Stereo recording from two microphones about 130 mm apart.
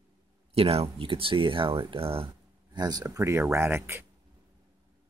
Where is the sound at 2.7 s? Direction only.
30° right (ahead or behind).